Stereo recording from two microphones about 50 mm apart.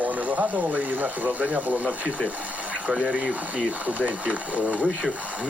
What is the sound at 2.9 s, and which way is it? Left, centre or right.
Speech, centre.